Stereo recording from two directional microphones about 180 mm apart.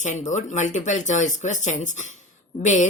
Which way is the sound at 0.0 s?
40° left (ahead or behind).